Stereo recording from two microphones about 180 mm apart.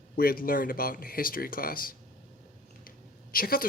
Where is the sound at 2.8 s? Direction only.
55° left (ahead or behind).